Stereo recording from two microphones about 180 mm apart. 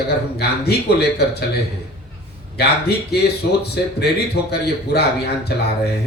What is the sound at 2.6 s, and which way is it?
A man's voice, 65° left (ahead or behind).